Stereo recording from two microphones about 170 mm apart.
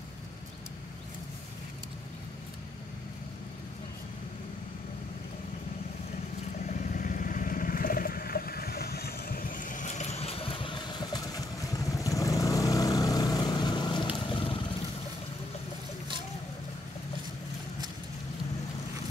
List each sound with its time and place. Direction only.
6.6 s vehicle: 50° left (ahead or behind); by 14.6 s 30° left (ahead or behind)